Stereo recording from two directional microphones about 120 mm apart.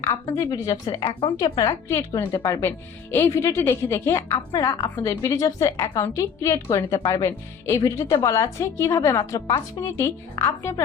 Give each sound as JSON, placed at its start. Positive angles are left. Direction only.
{"t": 0.0, "sound": "a woman's voice", "side_deg": 25}
{"t": 1.9, "sound": "a woman's voice", "side_deg": 25}